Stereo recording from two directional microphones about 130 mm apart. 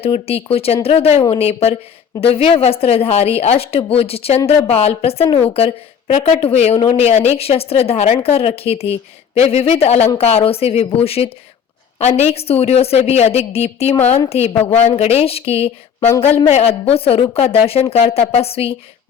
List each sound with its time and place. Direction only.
0.0 s a woman's voice: 50° left (ahead or behind)